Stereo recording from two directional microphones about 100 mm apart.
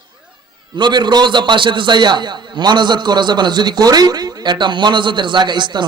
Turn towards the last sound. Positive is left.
turn(degrees=-50)  # may be behind; listen again after turning